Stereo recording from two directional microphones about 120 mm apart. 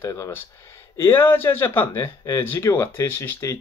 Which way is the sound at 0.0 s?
20° left (ahead or behind).